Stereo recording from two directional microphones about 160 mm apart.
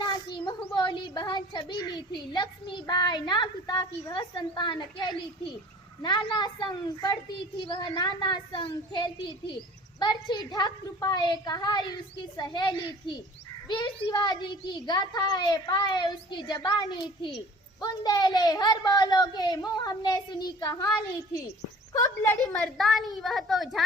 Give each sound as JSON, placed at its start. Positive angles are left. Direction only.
{"t": 0.0, "sound": "a child's voice", "side_deg": 30}
{"t": 22.5, "sound": "a woman's voice", "side_deg": 0}